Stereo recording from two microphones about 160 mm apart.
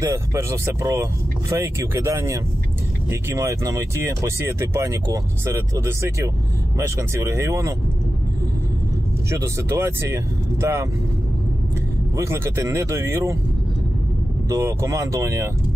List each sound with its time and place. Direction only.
0.0 s speech: 20° right (ahead or behind)
9.3 s speech: 15° right (ahead or behind)
12.2 s speech: 15° right (ahead or behind)
14.5 s speech: 20° right (ahead or behind)